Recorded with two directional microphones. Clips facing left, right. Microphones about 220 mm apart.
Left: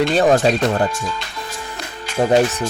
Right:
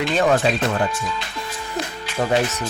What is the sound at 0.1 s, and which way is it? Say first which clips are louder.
Speech: left 4 dB; 35° left (ahead or behind).